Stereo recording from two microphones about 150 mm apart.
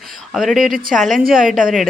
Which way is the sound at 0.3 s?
Centre (ahead or behind).